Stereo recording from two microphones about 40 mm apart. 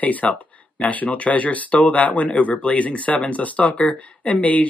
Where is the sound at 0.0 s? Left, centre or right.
Left.